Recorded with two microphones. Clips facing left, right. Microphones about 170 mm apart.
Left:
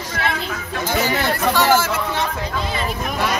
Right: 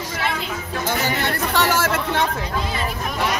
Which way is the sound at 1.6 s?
65° right (ahead or behind).